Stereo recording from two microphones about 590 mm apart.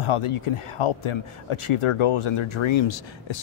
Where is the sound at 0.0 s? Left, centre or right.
Left.